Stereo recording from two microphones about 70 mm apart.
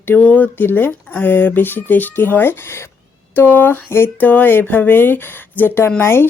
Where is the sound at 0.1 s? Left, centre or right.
Left.